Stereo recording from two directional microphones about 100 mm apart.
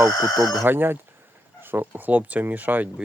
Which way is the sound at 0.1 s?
40° left (ahead or behind).